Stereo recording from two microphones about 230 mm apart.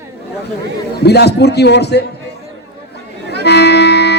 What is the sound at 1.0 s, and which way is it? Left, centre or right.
A man's voice, left.